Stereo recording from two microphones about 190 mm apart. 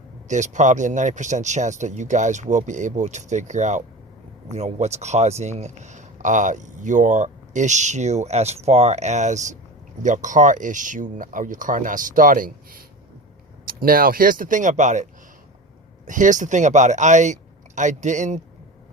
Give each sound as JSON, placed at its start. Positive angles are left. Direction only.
{"t": 0.3, "sound": "speech", "side_deg": -40}
{"t": 16.0, "sound": "speech", "side_deg": -40}